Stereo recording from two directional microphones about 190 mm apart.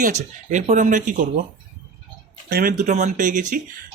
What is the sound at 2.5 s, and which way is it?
Speech, 50° right (ahead or behind).